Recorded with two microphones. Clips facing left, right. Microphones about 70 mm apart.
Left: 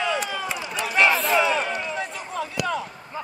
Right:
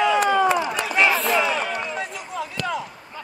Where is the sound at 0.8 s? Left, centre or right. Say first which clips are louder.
Left 2 dB; centre.